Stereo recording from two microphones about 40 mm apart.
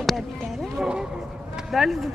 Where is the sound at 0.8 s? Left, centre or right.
Centre.